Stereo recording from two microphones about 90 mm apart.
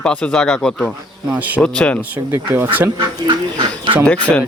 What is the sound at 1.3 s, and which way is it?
Speech, 20° right (ahead or behind).